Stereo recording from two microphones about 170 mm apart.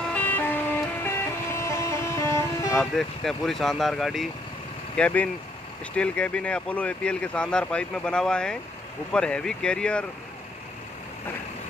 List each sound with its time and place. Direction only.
0.1 s vehicle: 10° left (ahead or behind)
1.0 s music: 15° left (ahead or behind)
2.8 s speech: centre (ahead or behind)